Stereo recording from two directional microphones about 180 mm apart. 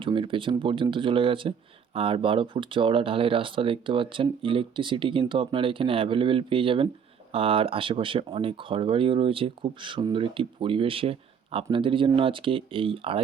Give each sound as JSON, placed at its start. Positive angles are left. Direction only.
{"t": 0.0, "sound": "speech", "side_deg": -30}